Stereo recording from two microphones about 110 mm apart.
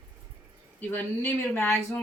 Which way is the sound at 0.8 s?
20° left (ahead or behind).